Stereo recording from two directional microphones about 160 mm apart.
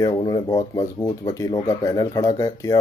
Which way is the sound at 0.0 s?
25° left (ahead or behind).